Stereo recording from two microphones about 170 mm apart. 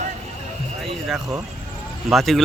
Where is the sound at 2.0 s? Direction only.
Centre (ahead or behind).